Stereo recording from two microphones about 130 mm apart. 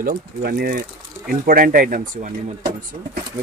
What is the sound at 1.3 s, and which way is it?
Speech, 90° right.